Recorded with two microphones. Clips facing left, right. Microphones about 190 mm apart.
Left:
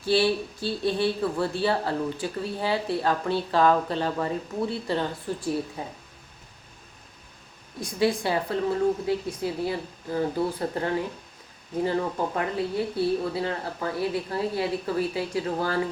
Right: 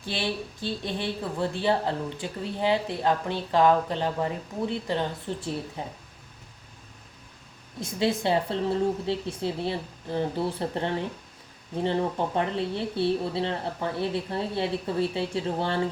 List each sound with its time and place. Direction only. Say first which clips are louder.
0.0 s a woman's voice: left 8 dB; 20° right (ahead or behind)
7.8 s speech: left 2 dB; 25° right (ahead or behind)